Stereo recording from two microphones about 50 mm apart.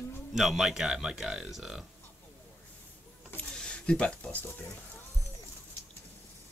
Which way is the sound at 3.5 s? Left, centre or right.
Centre.